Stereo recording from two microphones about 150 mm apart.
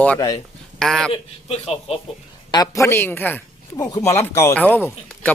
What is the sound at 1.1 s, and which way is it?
Speech, 40° left (ahead or behind).